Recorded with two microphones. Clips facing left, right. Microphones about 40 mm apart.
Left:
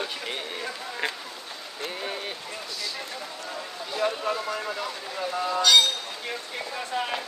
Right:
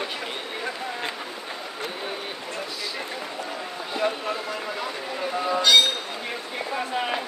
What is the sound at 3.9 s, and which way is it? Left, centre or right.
Speech, centre.